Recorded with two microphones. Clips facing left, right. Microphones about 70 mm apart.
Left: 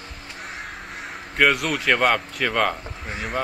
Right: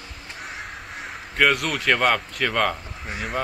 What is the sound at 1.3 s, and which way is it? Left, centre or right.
Speech, centre.